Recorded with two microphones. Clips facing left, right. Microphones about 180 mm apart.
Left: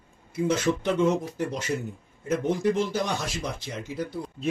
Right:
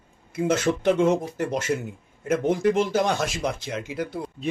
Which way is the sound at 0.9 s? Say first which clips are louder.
Even; 75° right (ahead or behind).